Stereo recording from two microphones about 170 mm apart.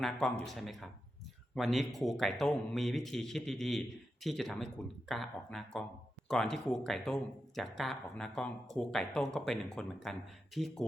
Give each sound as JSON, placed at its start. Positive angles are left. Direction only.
{"t": 0.0, "sound": "speech", "side_deg": 0}